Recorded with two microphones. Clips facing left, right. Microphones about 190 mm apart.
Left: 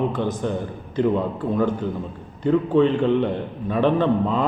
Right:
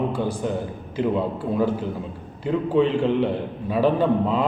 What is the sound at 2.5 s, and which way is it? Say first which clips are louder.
A man's voice: left 3 dB; 5° right (ahead or behind).